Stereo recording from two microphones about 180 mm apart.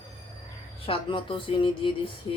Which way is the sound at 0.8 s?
30° left (ahead or behind).